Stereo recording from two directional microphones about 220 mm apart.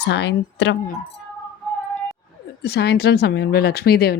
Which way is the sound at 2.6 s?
45° left (ahead or behind).